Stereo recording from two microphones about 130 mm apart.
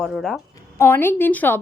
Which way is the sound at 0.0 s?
5° left (ahead or behind).